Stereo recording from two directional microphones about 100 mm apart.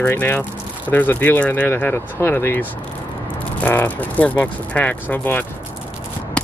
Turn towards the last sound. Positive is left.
turn(degrees=20)  # may be behind; listen again after turning